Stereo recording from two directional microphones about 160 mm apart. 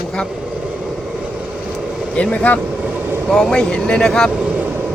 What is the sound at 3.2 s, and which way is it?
Speech, centre (ahead or behind).